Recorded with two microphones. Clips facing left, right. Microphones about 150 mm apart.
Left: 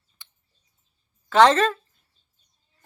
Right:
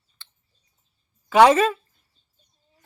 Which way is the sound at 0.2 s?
15° left (ahead or behind).